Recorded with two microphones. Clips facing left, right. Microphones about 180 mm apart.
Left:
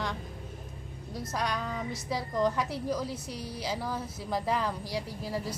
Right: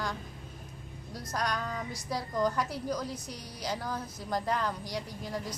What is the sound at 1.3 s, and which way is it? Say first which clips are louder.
Speech: even; 5° left (ahead or behind).